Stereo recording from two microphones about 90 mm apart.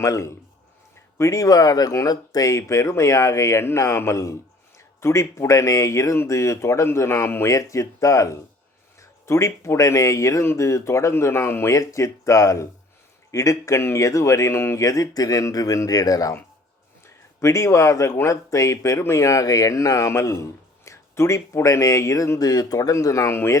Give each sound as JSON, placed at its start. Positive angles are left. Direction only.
{"t": 0.0, "sound": "speech", "side_deg": 35}
{"t": 17.4, "sound": "speech", "side_deg": 35}